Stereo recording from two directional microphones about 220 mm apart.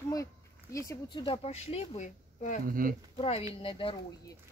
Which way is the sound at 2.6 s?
40° right (ahead or behind).